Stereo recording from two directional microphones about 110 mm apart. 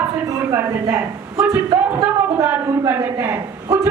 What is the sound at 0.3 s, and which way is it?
A woman's voice, 30° right (ahead or behind).